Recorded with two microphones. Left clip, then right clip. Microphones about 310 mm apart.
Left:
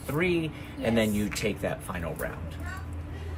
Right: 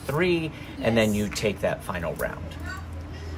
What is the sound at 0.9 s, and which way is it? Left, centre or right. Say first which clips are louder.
Speech: right 4 dB; right.